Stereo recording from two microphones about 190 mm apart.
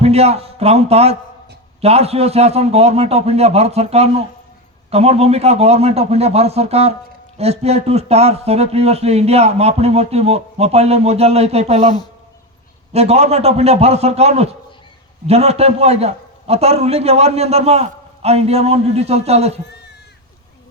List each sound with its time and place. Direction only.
0.0 s a man's voice: 35° right (ahead or behind)